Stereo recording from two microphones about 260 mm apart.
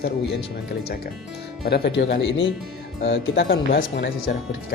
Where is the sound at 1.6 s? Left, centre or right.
Left.